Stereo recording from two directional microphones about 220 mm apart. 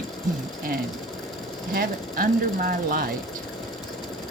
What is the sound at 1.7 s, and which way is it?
Speech, 40° right (ahead or behind).